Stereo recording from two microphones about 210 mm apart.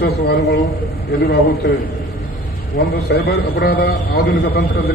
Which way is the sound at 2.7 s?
50° left (ahead or behind).